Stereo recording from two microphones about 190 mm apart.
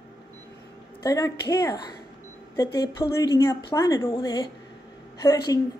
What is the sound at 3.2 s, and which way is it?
Speech, 20° left (ahead or behind).